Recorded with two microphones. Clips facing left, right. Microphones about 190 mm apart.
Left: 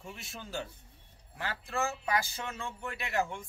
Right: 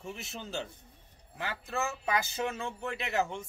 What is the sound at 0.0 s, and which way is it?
Speech, 25° right (ahead or behind).